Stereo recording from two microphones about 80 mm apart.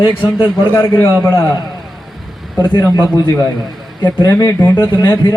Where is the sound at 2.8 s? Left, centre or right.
Left.